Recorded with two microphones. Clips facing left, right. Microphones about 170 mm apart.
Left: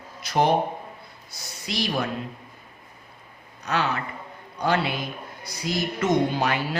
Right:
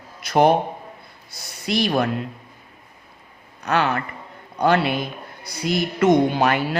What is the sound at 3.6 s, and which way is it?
Speech, 55° right (ahead or behind).